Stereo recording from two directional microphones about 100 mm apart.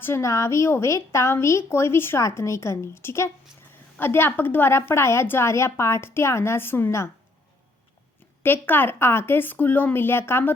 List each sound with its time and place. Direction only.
0.0 s a woman's voice: 25° left (ahead or behind)
8.4 s a woman's voice: 20° left (ahead or behind)